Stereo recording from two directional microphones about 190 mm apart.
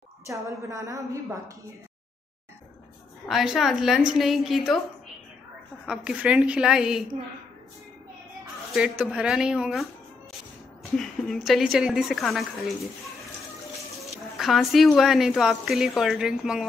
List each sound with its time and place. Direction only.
0.3 s a woman's voice: 15° right (ahead or behind)
3.3 s speech: centre (ahead or behind)
5.9 s speech: 5° right (ahead or behind)
8.7 s speech: 5° right (ahead or behind)
11.0 s speech: centre (ahead or behind)
14.0 s speech: centre (ahead or behind)